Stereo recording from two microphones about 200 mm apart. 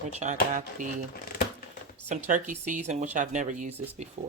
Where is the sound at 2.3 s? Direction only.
40° right (ahead or behind).